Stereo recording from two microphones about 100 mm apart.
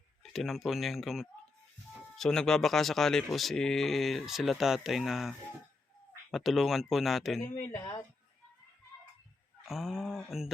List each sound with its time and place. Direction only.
0.2 s speech: centre (ahead or behind)
6.3 s speech: centre (ahead or behind)
7.4 s speech: 25° left (ahead or behind)
9.6 s speech: centre (ahead or behind)